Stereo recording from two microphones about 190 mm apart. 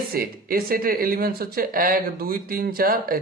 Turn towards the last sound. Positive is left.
turn(degrees=-50)  # may be behind; listen again after turning